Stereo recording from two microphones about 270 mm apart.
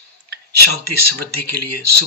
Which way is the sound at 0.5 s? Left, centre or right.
Right.